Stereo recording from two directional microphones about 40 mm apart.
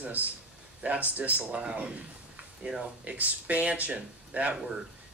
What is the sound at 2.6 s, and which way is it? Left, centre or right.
Speech, right.